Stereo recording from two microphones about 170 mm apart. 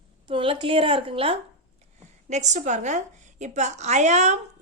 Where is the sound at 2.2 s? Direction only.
45° right (ahead or behind).